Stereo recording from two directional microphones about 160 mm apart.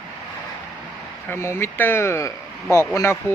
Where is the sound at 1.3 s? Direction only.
15° left (ahead or behind).